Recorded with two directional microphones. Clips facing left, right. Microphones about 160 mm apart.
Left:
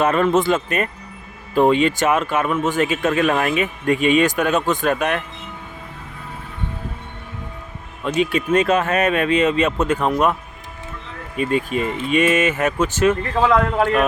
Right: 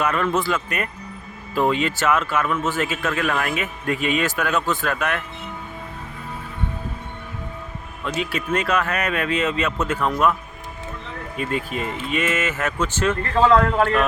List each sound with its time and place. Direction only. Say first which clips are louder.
0.0 s speech: left 5 dB; 25° left (ahead or behind)
8.0 s speech: left 6 dB; 20° left (ahead or behind)
11.3 s speech: left 6 dB; 20° left (ahead or behind)